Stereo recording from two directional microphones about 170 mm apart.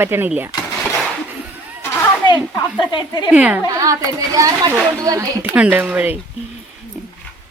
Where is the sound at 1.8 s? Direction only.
15° left (ahead or behind).